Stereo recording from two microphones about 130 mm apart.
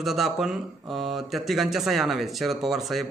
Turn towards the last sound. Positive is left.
turn(degrees=0)  # may be behind; listen again after turning